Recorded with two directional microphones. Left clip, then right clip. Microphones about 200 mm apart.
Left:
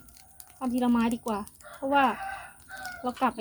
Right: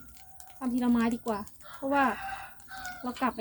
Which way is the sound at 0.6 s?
40° left (ahead or behind).